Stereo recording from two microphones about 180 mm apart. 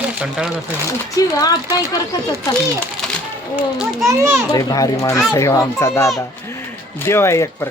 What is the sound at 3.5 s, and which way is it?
Speech, 5° right (ahead or behind).